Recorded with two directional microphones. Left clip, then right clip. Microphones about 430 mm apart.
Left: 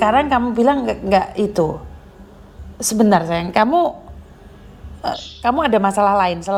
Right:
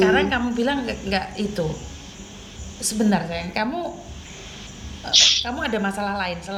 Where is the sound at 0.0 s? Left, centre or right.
Left.